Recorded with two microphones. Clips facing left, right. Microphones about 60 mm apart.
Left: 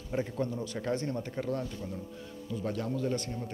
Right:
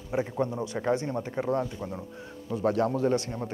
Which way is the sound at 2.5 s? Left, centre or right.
Right.